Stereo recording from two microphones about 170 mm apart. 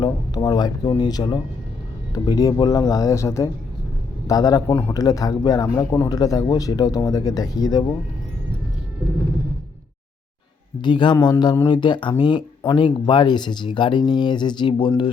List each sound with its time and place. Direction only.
0.0 s speech: 25° left (ahead or behind)
4.7 s a man's voice: 10° left (ahead or behind)
4.9 s speech: 20° left (ahead or behind)
10.8 s speech: 25° left (ahead or behind)